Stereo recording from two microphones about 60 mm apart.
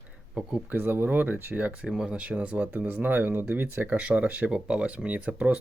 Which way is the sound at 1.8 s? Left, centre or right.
Centre.